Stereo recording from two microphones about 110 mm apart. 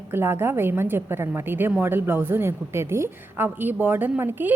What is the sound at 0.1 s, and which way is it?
A woman's voice, 20° right (ahead or behind).